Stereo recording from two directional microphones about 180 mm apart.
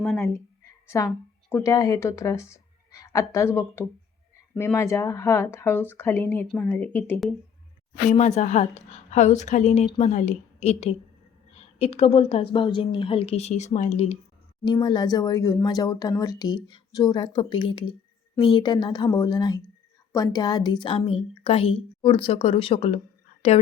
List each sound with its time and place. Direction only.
0.9 s speech: 15° left (ahead or behind)
8.1 s a woman's voice: 40° left (ahead or behind)
14.6 s a woman's voice: 25° left (ahead or behind)